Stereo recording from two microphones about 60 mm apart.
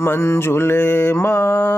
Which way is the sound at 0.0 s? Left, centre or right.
Left.